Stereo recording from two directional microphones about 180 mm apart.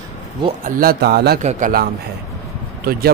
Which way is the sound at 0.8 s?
60° right (ahead or behind).